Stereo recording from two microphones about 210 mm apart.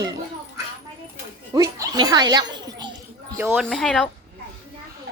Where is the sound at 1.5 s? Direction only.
20° right (ahead or behind).